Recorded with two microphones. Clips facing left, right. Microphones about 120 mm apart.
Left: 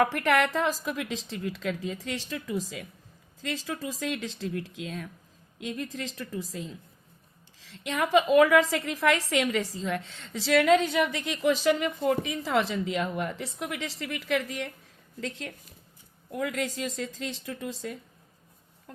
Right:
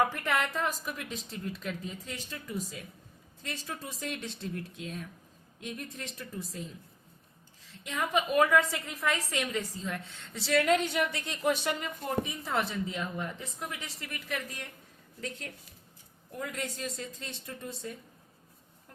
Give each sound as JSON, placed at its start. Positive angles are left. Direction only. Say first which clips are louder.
{"t": 0.0, "sound": "speech", "louder": "left 5 dB", "side_deg": 75}
{"t": 16.3, "sound": "speech", "louder": "left 7 dB", "side_deg": 90}
{"t": 18.9, "sound": "a sound", "louder": "left 9 dB", "side_deg": 90}